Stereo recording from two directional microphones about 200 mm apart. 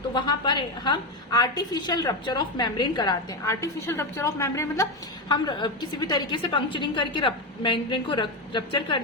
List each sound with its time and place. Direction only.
0.1 s a woman's voice: 20° left (ahead or behind)